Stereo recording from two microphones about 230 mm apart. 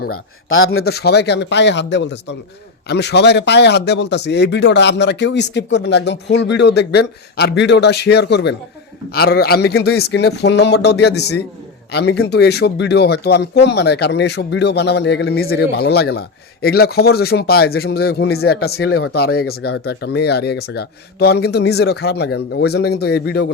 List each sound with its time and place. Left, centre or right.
0.1 s speech: left
0.9 s speech: left